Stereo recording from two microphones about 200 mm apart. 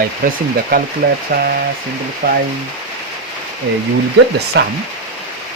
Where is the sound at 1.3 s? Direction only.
45° right (ahead or behind).